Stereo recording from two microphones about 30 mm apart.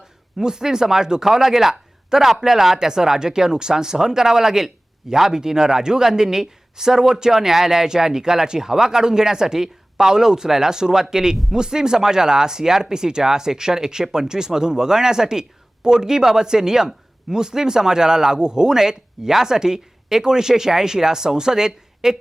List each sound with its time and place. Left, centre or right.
0.4 s a man's voice: right